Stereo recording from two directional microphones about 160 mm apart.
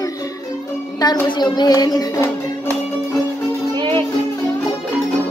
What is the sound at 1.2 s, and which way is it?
Music, 25° left (ahead or behind).